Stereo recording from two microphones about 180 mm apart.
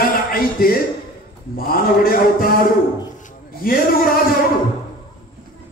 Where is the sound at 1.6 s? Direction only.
55° left (ahead or behind).